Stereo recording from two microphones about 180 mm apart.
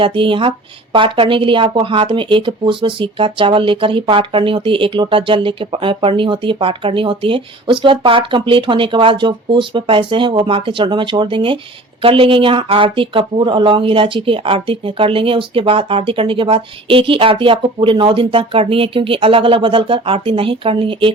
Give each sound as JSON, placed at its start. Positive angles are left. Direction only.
{"t": 0.0, "sound": "speech", "side_deg": -30}